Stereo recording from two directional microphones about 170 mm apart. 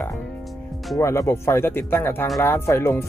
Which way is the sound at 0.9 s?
15° left (ahead or behind).